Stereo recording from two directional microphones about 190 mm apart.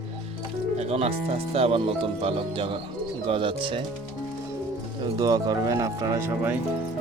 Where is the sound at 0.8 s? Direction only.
35° right (ahead or behind).